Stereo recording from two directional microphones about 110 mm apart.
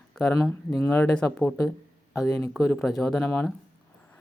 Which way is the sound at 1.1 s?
10° left (ahead or behind).